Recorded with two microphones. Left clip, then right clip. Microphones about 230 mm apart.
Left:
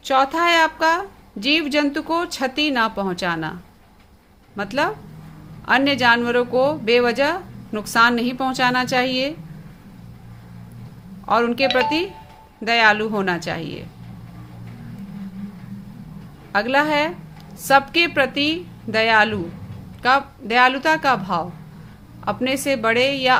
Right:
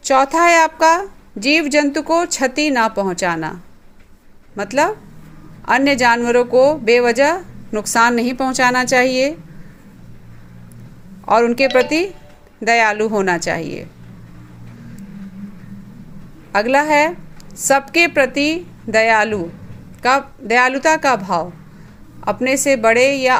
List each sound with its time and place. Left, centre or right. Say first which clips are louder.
0.0 s a woman's voice: right 5 dB; right
4.5 s a woman's voice: right 5 dB; right
11.3 s a woman's voice: right 5 dB; right
16.5 s a woman's voice: right 4 dB; right